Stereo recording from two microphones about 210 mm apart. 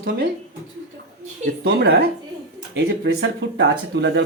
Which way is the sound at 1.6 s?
50° right (ahead or behind).